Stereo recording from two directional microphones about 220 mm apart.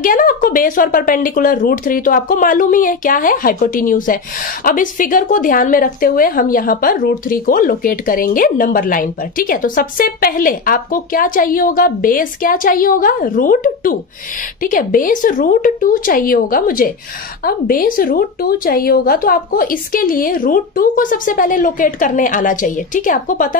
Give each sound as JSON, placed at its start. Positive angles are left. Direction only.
{"t": 0.0, "sound": "a woman's voice", "side_deg": 40}